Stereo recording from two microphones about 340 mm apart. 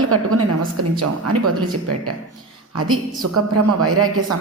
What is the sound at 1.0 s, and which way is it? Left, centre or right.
A woman's voice, right.